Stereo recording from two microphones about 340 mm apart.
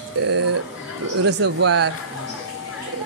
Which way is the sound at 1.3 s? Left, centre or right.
Right.